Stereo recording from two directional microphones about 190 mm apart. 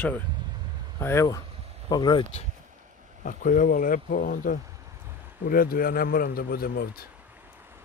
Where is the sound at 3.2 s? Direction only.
45° left (ahead or behind).